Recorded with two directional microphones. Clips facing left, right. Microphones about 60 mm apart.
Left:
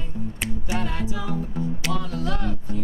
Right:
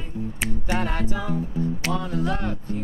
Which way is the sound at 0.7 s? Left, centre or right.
Right.